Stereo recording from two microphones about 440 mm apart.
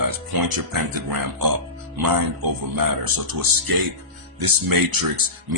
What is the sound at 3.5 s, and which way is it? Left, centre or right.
Speech, right.